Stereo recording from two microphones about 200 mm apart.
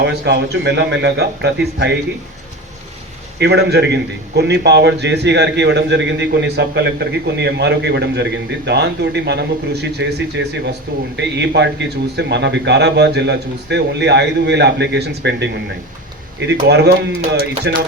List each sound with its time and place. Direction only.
0.0 s a man's voice: 60° right (ahead or behind)
3.3 s a man's voice: 55° right (ahead or behind)
16.5 s a man's voice: 55° right (ahead or behind)